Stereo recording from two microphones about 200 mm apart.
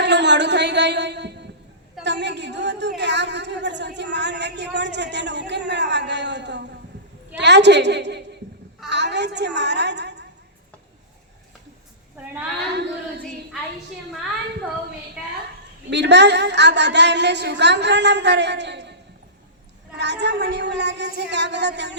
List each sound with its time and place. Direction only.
0.0 s a woman's voice: 60° right (ahead or behind)
2.0 s a sound: 60° right (ahead or behind)
3.0 s a woman's voice: 60° right (ahead or behind)
15.9 s a woman's voice: 60° right (ahead or behind)
20.0 s a woman's voice: 60° right (ahead or behind)